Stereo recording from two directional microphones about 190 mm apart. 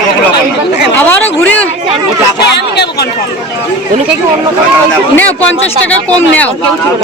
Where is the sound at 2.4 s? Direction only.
60° left (ahead or behind).